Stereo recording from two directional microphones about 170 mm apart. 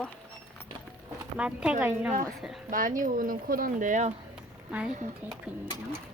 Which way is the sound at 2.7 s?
50° right (ahead or behind).